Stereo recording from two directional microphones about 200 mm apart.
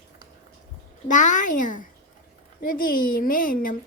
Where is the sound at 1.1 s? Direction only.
40° left (ahead or behind).